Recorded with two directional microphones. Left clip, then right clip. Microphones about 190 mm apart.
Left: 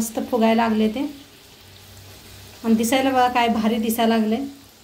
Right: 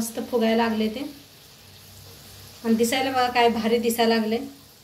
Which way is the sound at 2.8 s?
45° left (ahead or behind).